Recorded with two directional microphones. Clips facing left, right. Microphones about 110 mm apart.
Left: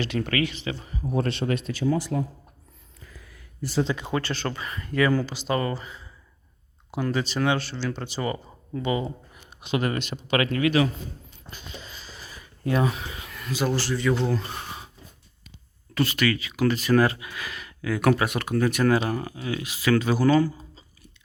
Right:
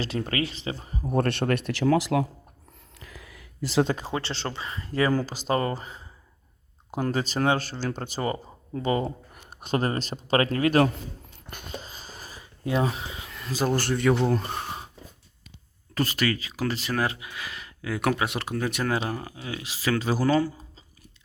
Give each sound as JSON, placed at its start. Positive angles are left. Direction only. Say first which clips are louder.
{"t": 0.2, "sound": "speech", "louder": "left 4 dB", "side_deg": -30}
{"t": 1.1, "sound": "speech", "louder": "right 2 dB", "side_deg": -60}
{"t": 3.0, "sound": "a sound", "louder": "right 3 dB", "side_deg": -90}
{"t": 3.8, "sound": "speech", "louder": "right 1 dB", "side_deg": -40}
{"t": 4.1, "sound": "speech", "louder": "left 3 dB", "side_deg": -25}
{"t": 11.5, "sound": "a sound", "louder": "right 3 dB", "side_deg": -45}
{"t": 12.4, "sound": "a sound", "louder": "left 1 dB", "side_deg": -25}
{"t": 13.5, "sound": "speech", "louder": "right 1 dB", "side_deg": -40}
{"t": 14.3, "sound": "speech", "louder": "right 2 dB", "side_deg": -45}
{"t": 16.0, "sound": "speech", "louder": "left 2 dB", "side_deg": -35}